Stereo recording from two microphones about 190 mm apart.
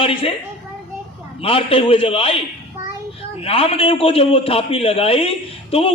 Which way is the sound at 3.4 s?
30° left (ahead or behind).